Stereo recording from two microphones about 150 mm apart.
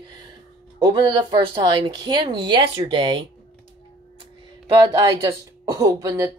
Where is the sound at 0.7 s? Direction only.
25° right (ahead or behind).